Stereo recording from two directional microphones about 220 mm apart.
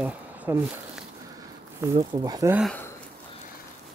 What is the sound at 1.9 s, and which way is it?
Speech, 25° right (ahead or behind).